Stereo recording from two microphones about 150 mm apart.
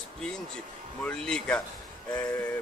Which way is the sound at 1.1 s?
5° left (ahead or behind).